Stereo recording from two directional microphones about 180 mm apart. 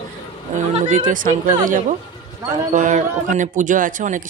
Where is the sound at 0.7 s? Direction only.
40° right (ahead or behind).